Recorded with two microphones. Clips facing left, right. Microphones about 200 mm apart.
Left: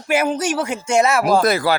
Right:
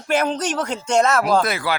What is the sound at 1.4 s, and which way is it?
Speech, 40° left (ahead or behind).